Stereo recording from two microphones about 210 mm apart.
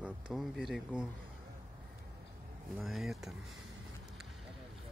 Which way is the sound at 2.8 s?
Centre (ahead or behind).